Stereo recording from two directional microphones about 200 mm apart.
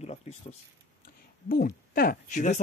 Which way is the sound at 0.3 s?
30° left (ahead or behind).